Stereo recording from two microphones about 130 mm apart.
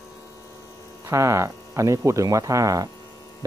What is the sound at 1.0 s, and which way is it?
Speech, 20° right (ahead or behind).